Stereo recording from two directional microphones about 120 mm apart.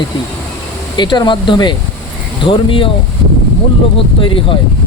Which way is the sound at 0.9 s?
35° left (ahead or behind).